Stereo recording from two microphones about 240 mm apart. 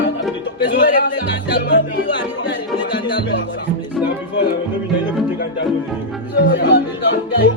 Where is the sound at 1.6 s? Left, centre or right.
Left.